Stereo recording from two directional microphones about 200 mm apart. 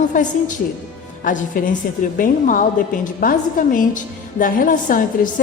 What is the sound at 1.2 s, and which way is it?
A woman's voice, 40° left (ahead or behind).